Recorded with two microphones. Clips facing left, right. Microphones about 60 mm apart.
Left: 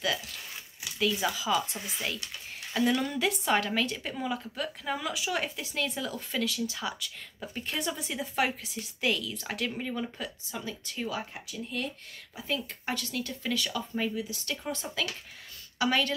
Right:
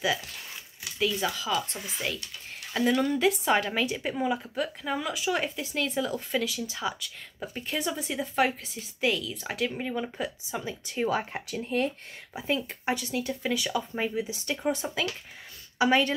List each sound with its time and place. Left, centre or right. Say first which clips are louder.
0.9 s a woman's voice: right 1 dB; centre
2.8 s a woman's voice: right 3 dB; centre
9.8 s speech: right 3 dB; centre
11.1 s speech: right 8 dB; right
12.4 s a woman's voice: right 4 dB; right